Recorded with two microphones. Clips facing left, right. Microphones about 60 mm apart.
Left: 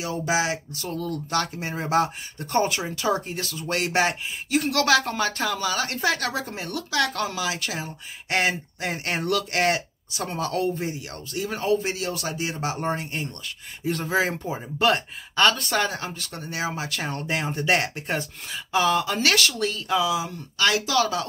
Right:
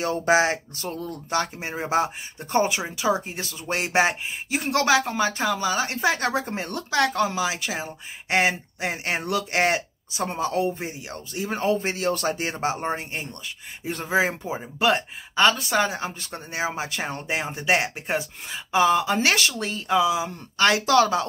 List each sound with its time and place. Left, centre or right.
0.0 s speech: right
7.2 s speech: right
17.5 s speech: centre
19.2 s speech: right
20.6 s speech: right